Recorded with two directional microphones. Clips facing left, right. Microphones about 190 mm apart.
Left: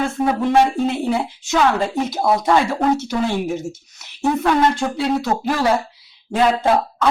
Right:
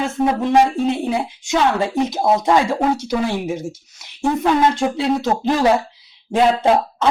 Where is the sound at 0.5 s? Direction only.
20° right (ahead or behind).